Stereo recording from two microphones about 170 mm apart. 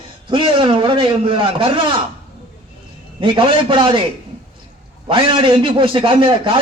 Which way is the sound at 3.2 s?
30° right (ahead or behind).